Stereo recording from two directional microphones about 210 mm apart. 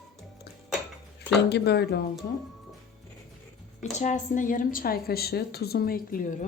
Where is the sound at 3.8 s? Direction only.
35° left (ahead or behind).